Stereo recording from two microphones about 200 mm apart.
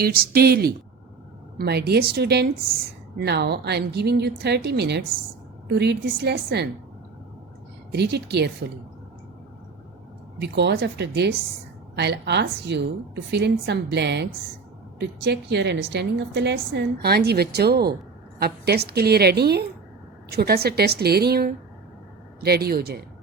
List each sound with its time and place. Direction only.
0.0 s a woman's voice: 50° right (ahead or behind)
7.9 s a woman's voice: 55° right (ahead or behind)
10.4 s a woman's voice: 60° right (ahead or behind)